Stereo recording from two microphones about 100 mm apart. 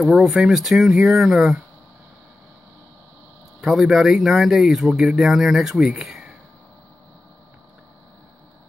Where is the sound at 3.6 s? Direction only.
5° right (ahead or behind).